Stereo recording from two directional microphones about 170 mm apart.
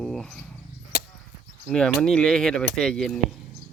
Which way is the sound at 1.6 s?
5° left (ahead or behind).